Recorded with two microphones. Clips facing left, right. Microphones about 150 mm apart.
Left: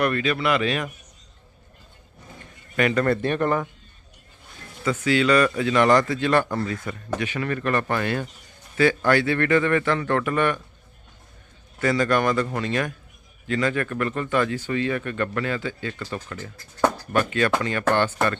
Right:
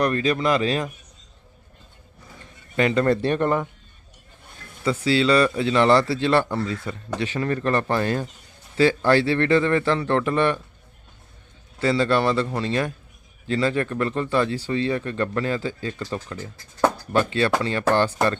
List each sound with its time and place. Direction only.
0.0 s a man's voice: 35° right (ahead or behind)
2.7 s speech: 25° right (ahead or behind)
3.4 s speech: 10° right (ahead or behind)
4.8 s speech: 30° right (ahead or behind)
6.4 s speech: 10° right (ahead or behind)
6.9 s a man's voice: 25° right (ahead or behind)
11.8 s a man's voice: 25° right (ahead or behind)
15.9 s speech: 20° right (ahead or behind)